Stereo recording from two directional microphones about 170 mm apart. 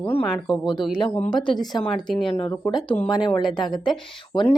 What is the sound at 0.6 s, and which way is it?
Speech, 25° left (ahead or behind).